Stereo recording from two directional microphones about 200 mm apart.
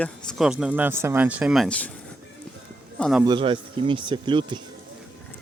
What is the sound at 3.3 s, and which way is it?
Speech, 25° right (ahead or behind).